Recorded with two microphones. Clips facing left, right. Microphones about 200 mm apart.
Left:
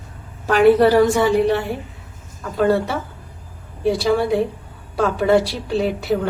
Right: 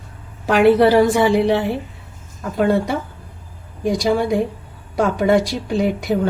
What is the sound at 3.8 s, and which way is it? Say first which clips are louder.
A woman's voice: even; 15° right (ahead or behind).